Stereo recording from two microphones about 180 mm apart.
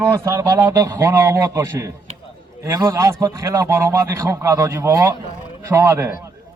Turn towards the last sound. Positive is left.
turn(degrees=-15)  # may be behind; listen again after turning